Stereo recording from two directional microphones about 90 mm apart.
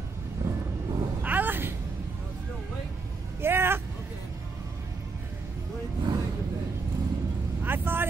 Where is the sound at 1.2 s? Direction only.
20° right (ahead or behind).